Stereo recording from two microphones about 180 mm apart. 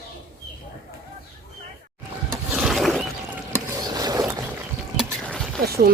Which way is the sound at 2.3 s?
Centre (ahead or behind).